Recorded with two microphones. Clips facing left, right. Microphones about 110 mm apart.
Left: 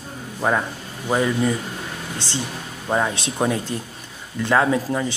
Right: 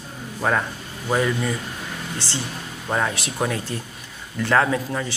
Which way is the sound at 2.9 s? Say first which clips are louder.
Left 2 dB; 20° left (ahead or behind).